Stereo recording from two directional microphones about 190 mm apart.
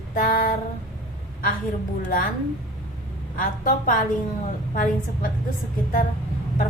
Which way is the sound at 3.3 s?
45° left (ahead or behind).